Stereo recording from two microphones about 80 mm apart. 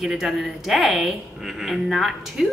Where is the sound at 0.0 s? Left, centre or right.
Centre.